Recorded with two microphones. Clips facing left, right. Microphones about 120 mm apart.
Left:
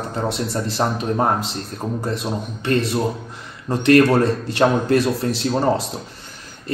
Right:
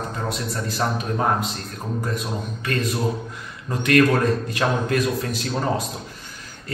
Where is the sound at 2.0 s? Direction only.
30° left (ahead or behind).